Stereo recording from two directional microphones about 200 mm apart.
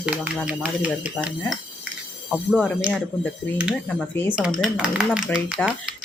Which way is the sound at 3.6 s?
5° right (ahead or behind).